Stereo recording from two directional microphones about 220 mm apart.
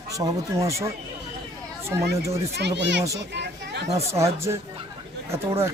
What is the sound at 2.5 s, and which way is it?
Speech, 50° right (ahead or behind).